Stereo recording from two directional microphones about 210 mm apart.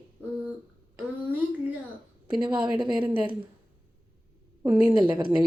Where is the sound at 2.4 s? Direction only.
20° right (ahead or behind).